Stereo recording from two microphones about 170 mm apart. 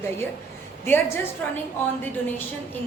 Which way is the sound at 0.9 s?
15° left (ahead or behind).